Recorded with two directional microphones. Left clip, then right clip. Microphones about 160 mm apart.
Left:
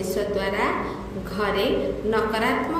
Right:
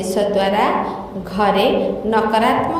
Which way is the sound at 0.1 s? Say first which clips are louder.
Right 10 dB; 40° right (ahead or behind).